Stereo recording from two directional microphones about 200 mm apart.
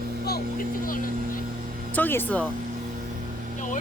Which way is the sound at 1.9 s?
10° left (ahead or behind).